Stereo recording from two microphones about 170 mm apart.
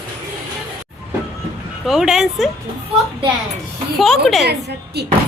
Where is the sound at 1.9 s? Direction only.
5° right (ahead or behind).